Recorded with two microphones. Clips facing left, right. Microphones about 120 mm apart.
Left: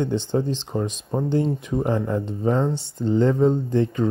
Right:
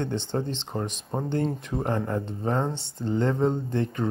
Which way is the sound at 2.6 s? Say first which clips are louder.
Left 5 dB; 20° right (ahead or behind).